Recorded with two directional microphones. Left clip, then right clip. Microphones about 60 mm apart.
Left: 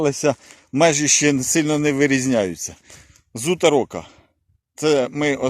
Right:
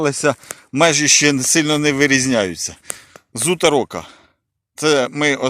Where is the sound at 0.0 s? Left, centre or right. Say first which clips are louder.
Right 2 dB; left.